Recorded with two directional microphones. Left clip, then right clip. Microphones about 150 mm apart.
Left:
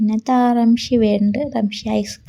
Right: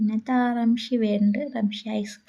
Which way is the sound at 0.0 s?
30° left (ahead or behind).